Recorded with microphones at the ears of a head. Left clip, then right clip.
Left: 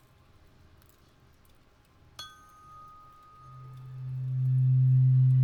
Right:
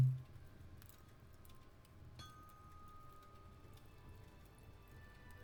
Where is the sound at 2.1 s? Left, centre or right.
Left.